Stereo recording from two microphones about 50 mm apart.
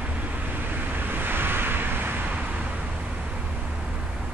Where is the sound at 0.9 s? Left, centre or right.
Right.